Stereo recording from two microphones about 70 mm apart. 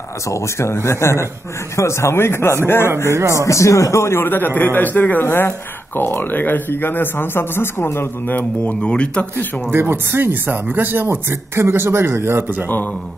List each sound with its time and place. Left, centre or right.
0.3 s speech: left
3.1 s speech: right
3.4 s speech: left
8.3 s a man's voice: left
9.7 s speech: right